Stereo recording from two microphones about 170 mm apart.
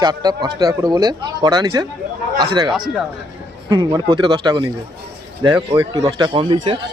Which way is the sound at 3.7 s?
25° right (ahead or behind).